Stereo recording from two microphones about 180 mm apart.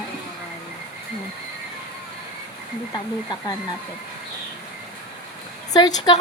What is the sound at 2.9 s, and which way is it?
Speech, 25° left (ahead or behind).